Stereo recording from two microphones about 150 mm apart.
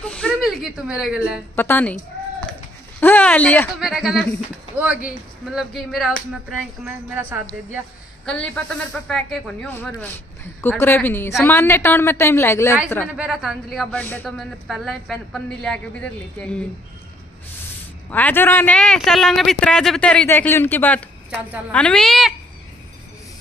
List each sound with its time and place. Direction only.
0.0 s speech: 5° left (ahead or behind)
1.5 s speech: 15° left (ahead or behind)
3.0 s speech: 10° left (ahead or behind)
3.8 s speech: 5° right (ahead or behind)
5.5 s speech: centre (ahead or behind)
6.8 s a woman's voice: 15° right (ahead or behind)
8.3 s speech: 5° left (ahead or behind)
13.1 s speech: 5° right (ahead or behind)
14.0 s speech: 15° left (ahead or behind)
14.4 s speech: centre (ahead or behind)
18.1 s speech: 10° left (ahead or behind)
21.4 s a woman's voice: 10° right (ahead or behind)
21.7 s speech: 5° left (ahead or behind)